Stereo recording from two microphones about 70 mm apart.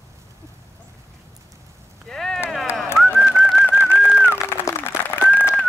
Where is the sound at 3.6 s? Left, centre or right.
Left.